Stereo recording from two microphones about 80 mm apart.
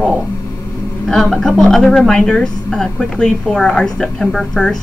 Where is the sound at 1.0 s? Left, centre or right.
Centre.